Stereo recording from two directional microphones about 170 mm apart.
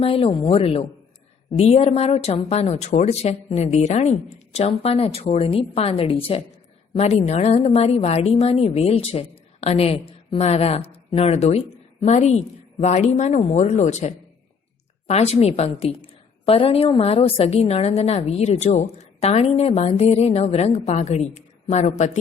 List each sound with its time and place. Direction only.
0.0 s a woman's voice: 35° left (ahead or behind)